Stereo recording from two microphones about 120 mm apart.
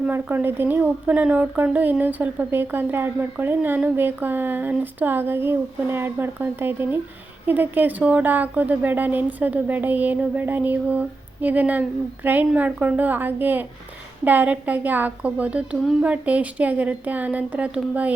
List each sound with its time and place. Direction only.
0.0 s speech: 15° right (ahead or behind)